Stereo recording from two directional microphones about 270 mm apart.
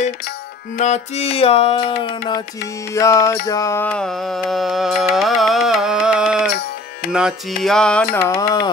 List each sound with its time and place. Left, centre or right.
0.7 s music: left
2.0 s carnatic music: centre
7.1 s music: centre
7.6 s carnatic music: centre